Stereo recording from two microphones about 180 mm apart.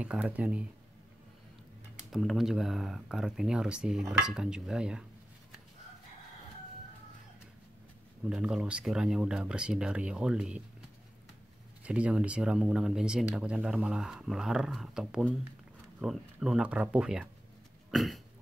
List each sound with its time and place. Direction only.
0.0 s speech: 10° right (ahead or behind)
2.0 s speech: centre (ahead or behind)
8.3 s speech: 5° right (ahead or behind)
11.8 s speech: 5° right (ahead or behind)